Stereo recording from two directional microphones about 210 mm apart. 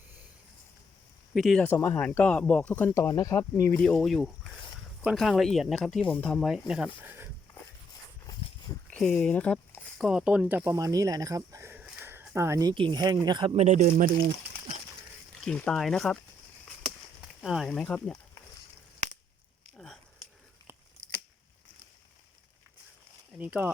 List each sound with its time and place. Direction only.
1.3 s speech: centre (ahead or behind)
8.9 s speech: 5° left (ahead or behind); by 14.3 s 40° right (ahead or behind)
15.4 s speech: 5° left (ahead or behind)
17.4 s speech: centre (ahead or behind)
19.7 s a sound: 5° left (ahead or behind)
23.4 s speech: 10° right (ahead or behind)